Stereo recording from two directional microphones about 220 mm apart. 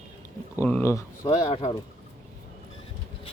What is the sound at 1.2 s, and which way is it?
Speech, 25° left (ahead or behind).